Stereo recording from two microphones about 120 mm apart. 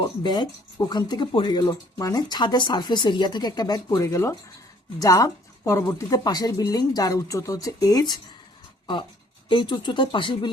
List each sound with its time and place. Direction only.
0.0 s speech: 35° left (ahead or behind)
1.6 s speech: 30° left (ahead or behind)
9.5 s speech: 40° left (ahead or behind)